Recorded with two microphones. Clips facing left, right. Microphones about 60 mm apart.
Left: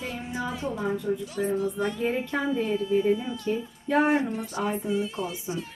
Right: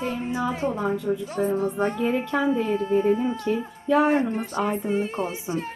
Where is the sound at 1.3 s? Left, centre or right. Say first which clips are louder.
Right 3 dB; right.